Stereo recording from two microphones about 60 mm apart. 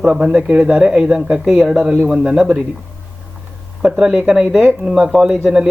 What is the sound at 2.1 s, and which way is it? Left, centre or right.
Speech, centre.